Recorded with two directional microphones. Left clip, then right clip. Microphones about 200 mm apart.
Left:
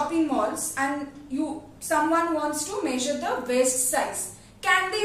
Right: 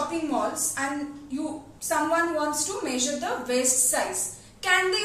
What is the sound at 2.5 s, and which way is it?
A woman's voice, 15° left (ahead or behind).